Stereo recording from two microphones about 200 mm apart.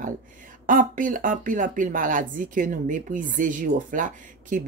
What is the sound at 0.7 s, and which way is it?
Speech, 40° right (ahead or behind).